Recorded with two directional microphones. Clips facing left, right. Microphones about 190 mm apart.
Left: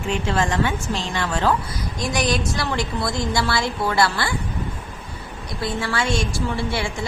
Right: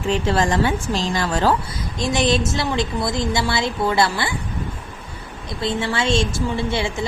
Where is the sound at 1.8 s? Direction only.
25° right (ahead or behind).